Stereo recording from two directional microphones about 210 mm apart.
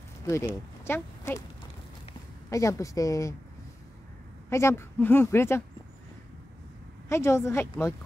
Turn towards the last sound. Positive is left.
turn(degrees=10)  # may be behind; listen again after turning